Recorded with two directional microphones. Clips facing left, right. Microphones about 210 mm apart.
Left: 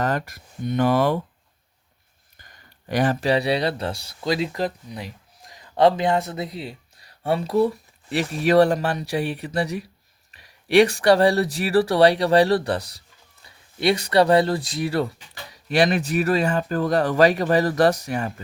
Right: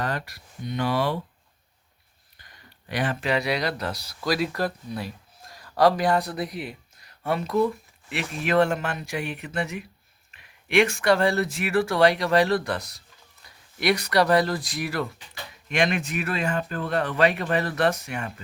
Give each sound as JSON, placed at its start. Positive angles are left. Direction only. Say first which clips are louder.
{"t": 0.0, "sound": "speech", "louder": "left 5 dB", "side_deg": 45}
{"t": 2.9, "sound": "speech", "louder": "left 5 dB", "side_deg": 40}